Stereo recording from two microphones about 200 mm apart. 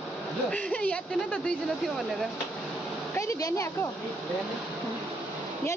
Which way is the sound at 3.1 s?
15° left (ahead or behind).